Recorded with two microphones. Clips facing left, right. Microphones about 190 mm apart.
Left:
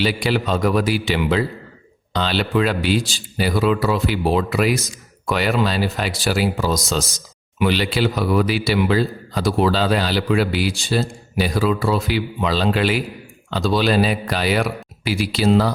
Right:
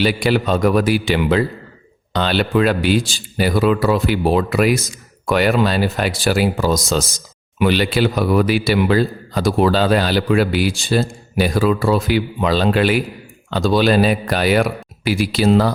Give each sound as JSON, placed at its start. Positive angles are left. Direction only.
{"t": 0.0, "sound": "a man's voice", "side_deg": -50}